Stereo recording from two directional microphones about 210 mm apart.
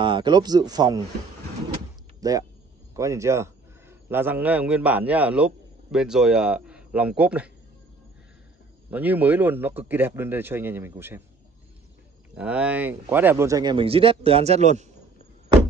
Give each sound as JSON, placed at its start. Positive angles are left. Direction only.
{"t": 0.0, "sound": "speech", "side_deg": -20}
{"t": 2.1, "sound": "a sound", "side_deg": -15}
{"t": 3.0, "sound": "a man's voice", "side_deg": -15}
{"t": 8.9, "sound": "a man's voice", "side_deg": -10}
{"t": 12.4, "sound": "speech", "side_deg": -5}